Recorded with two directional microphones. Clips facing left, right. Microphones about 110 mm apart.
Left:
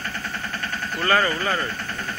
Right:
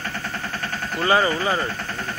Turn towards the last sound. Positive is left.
turn(degrees=-15)  # may be behind; listen again after turning